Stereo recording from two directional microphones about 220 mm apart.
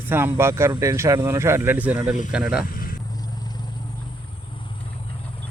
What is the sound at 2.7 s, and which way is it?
Vehicle, 40° left (ahead or behind).